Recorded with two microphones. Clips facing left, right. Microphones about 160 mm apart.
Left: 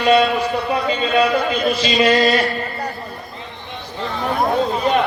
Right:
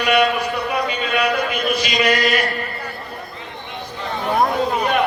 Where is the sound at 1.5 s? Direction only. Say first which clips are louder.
Left 3 dB; 30° left (ahead or behind).